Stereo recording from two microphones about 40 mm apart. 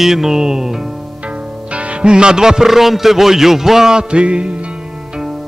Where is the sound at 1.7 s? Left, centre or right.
Right.